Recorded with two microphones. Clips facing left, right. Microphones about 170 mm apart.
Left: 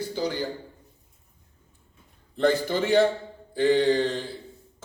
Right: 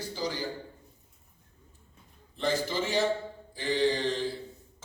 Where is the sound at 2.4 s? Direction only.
60° left (ahead or behind).